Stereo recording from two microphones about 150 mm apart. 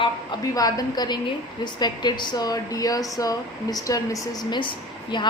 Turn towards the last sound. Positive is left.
turn(degrees=30)  # may be behind; listen again after turning